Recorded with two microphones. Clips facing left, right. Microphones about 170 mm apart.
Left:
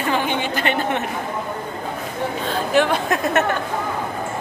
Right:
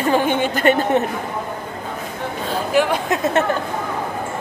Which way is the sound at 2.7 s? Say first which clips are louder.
Even; 10° right (ahead or behind).